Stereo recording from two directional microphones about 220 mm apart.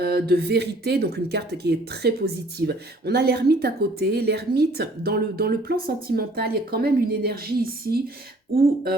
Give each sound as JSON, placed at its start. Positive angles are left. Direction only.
{"t": 0.0, "sound": "speech", "side_deg": -45}